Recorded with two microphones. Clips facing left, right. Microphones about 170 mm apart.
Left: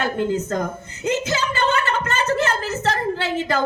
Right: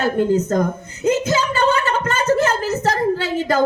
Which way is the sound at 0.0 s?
40° right (ahead or behind).